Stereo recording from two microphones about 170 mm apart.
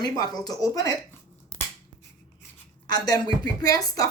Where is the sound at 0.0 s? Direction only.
20° left (ahead or behind).